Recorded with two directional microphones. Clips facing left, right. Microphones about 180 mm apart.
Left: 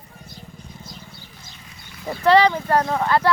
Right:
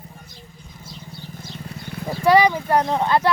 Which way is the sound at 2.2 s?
10° right (ahead or behind).